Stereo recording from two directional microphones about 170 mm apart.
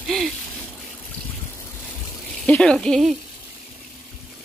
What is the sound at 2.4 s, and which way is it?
Speech, 5° left (ahead or behind).